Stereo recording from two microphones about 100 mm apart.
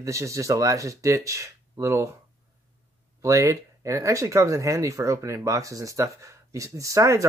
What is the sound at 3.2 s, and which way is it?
Speech, 30° right (ahead or behind).